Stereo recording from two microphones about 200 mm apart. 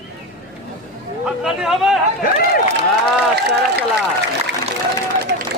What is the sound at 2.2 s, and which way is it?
Speech, 45° left (ahead or behind).